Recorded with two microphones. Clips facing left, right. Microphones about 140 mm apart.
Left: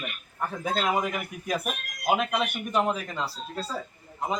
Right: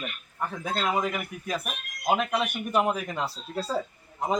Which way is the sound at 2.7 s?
10° right (ahead or behind).